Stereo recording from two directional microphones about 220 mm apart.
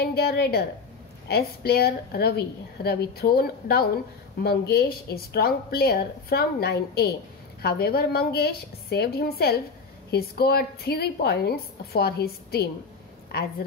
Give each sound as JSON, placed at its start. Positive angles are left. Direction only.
{"t": 0.0, "sound": "a woman's voice", "side_deg": 45}